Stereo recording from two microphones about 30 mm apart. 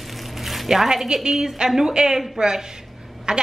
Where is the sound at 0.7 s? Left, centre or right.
Centre.